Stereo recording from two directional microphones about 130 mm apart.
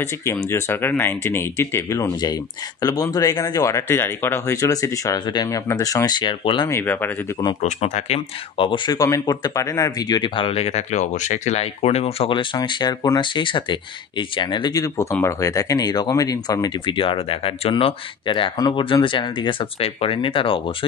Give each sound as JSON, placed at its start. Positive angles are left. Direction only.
{"t": 0.2, "sound": "speech", "side_deg": 20}
{"t": 6.7, "sound": "speech", "side_deg": 15}
{"t": 7.6, "sound": "speech", "side_deg": 60}
{"t": 8.5, "sound": "speech", "side_deg": 40}